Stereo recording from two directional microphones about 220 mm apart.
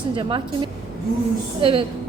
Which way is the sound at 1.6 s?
25° right (ahead or behind).